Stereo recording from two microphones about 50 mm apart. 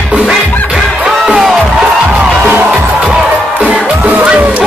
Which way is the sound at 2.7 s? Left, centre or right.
Centre.